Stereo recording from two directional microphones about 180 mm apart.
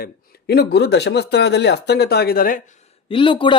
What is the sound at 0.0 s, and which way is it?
Speech, 60° left (ahead or behind).